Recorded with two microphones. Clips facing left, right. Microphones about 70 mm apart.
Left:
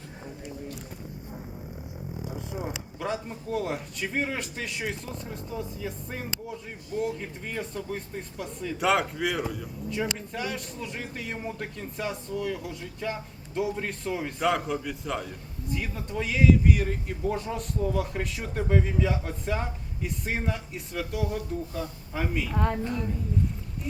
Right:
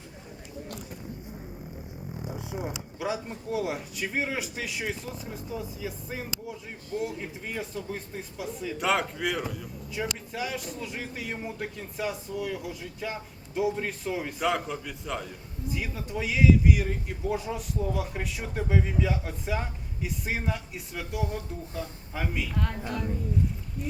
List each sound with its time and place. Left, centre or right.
2.5 s speech: centre
22.5 s speech: centre